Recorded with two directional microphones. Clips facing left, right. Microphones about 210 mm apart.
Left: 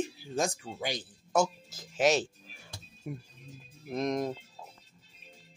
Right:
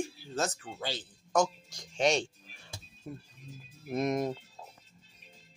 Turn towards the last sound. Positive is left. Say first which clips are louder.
# right 1 dB
turn(degrees=-5)  # may be behind; listen again after turning